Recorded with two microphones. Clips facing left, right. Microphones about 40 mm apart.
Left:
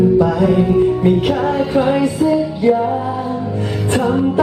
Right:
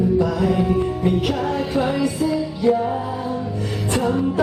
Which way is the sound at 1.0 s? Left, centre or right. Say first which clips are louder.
Left 6 dB; left.